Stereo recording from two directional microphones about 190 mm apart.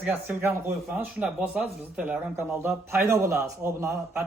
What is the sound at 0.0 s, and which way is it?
Speech, 10° right (ahead or behind).